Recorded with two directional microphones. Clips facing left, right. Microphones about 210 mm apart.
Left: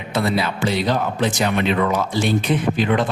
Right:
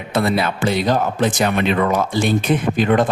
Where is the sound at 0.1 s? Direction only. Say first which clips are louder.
Right 2 dB; 55° right (ahead or behind).